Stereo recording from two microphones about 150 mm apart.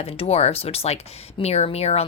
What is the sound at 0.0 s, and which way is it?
Speech, 40° left (ahead or behind).